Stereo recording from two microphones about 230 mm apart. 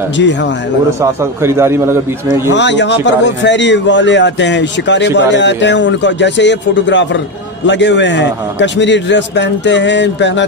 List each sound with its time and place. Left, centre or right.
0.2 s a man's voice: left
1.2 s a man's voice: centre
2.5 s a man's voice: left